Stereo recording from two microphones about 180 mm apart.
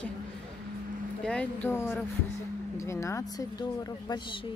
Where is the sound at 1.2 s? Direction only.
5° left (ahead or behind).